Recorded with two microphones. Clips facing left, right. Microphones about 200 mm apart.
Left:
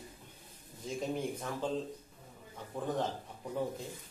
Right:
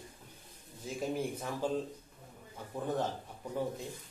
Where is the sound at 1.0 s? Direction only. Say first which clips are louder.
Right 1 dB; 10° right (ahead or behind).